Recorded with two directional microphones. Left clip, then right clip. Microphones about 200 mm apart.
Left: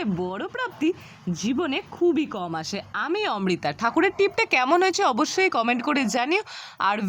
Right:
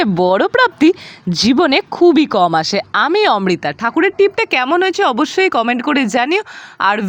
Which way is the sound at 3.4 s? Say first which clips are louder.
Right 8 dB; 25° right (ahead or behind).